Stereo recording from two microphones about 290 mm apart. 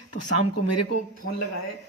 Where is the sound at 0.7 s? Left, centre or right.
Left.